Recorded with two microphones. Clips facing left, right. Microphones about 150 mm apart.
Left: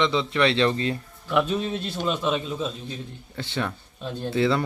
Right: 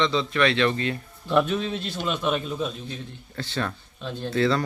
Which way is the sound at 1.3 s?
10° left (ahead or behind).